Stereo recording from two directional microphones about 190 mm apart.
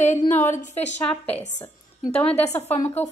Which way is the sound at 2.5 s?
10° left (ahead or behind).